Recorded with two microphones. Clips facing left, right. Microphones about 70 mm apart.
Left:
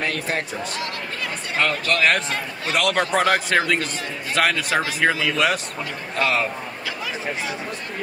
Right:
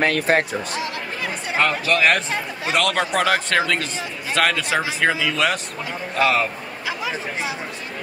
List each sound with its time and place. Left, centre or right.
0.0 s speech: right
1.6 s a man's voice: centre